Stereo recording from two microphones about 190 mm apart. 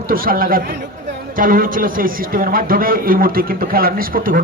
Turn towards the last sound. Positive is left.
turn(degrees=-50)  # may be behind; listen again after turning